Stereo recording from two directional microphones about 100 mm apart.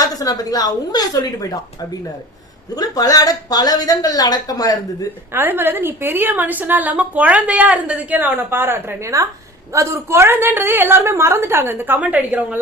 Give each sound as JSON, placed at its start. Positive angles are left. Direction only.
{"t": 0.0, "sound": "speech", "side_deg": 40}
{"t": 2.7, "sound": "speech", "side_deg": 40}
{"t": 5.3, "sound": "a woman's voice", "side_deg": -20}